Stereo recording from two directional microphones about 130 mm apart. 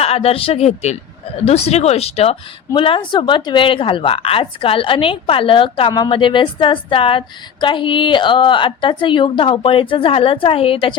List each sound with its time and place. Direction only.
0.0 s a woman's voice: 50° left (ahead or behind)